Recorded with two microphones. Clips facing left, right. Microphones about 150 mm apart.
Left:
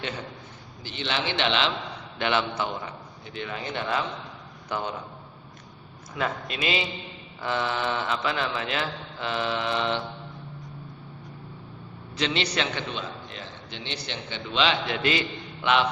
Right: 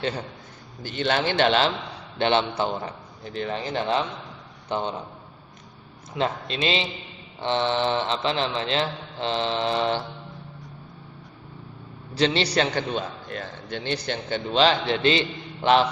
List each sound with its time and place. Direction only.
0.8 s a man's voice: 50° right (ahead or behind)
2.1 s a man's voice: 30° right (ahead or behind)
6.1 s a man's voice: 30° right (ahead or behind)
12.1 s a man's voice: 35° right (ahead or behind)